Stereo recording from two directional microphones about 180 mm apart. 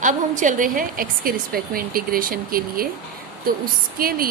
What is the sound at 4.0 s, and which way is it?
Speech, 55° right (ahead or behind).